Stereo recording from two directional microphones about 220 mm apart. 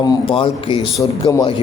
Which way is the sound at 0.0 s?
20° left (ahead or behind).